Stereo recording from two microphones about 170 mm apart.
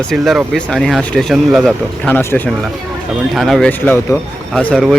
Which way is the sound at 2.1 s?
10° left (ahead or behind).